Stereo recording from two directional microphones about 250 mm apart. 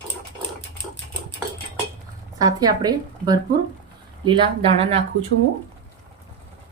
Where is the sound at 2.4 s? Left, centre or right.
Centre.